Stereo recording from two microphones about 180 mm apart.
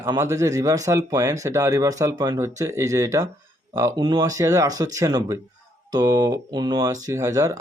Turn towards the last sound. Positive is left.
turn(degrees=-20)  # may be behind; listen again after turning